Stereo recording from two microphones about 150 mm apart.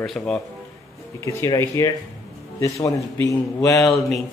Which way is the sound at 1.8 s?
20° left (ahead or behind).